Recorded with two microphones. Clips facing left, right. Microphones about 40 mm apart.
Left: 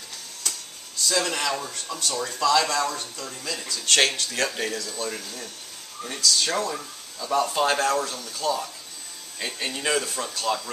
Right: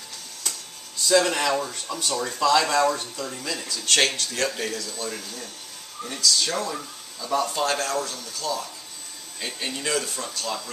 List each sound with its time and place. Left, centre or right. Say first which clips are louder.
1.2 s speech: right 3 dB; centre
3.4 s speech: left 2 dB; centre
8.4 s speech: left 3 dB; centre
9.4 s speech: left 1 dB; centre